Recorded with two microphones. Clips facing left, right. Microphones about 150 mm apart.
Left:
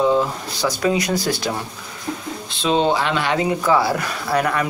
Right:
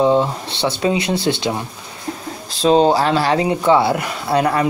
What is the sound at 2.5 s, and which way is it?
Speech, 35° right (ahead or behind).